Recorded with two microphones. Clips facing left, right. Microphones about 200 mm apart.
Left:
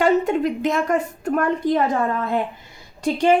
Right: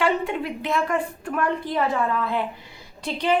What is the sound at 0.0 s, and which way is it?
A woman's voice, 40° left (ahead or behind).